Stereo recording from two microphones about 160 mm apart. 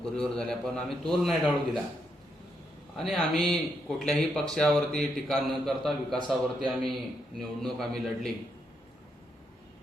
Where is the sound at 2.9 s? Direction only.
Centre (ahead or behind).